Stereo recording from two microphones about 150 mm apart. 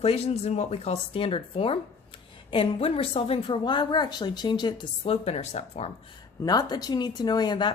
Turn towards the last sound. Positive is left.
turn(degrees=30)  # may be behind; listen again after turning